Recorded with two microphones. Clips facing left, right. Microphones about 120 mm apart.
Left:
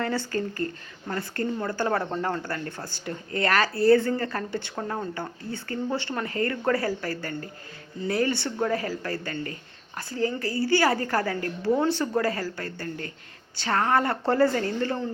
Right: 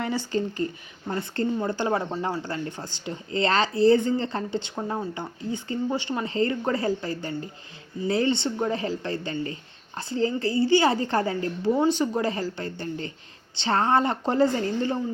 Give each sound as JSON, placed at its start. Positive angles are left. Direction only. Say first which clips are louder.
{"t": 0.0, "sound": "speech", "louder": "right 1 dB", "side_deg": -15}